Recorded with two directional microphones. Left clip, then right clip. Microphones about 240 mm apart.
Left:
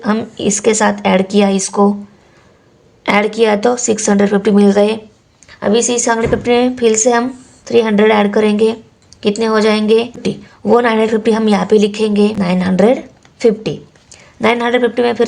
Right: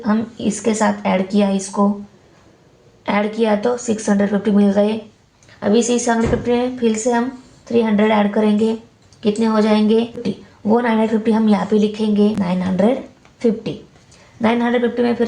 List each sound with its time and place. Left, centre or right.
0.0 s a woman's voice: left
3.0 s a woman's voice: left